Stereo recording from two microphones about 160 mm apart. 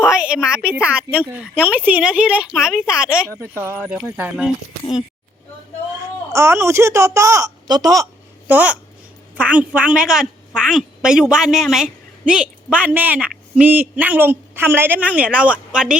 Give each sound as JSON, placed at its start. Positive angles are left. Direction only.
{"t": 0.0, "sound": "a sound", "side_deg": -5}
{"t": 0.4, "sound": "a woman's voice", "side_deg": -5}
{"t": 3.2, "sound": "speech", "side_deg": 15}
{"t": 3.8, "sound": "speech", "side_deg": -5}
{"t": 6.3, "sound": "speech", "side_deg": -15}
{"t": 8.4, "sound": "a woman's voice", "side_deg": -10}